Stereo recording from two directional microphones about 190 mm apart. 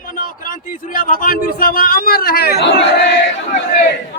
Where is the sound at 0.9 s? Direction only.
45° left (ahead or behind).